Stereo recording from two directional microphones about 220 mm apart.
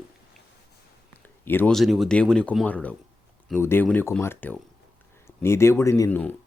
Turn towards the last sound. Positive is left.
turn(degrees=10)  # may be behind; listen again after turning